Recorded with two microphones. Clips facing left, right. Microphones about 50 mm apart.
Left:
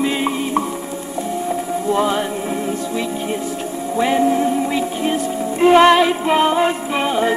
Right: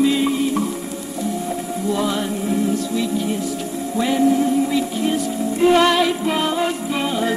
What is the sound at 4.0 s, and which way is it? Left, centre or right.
Speech, left.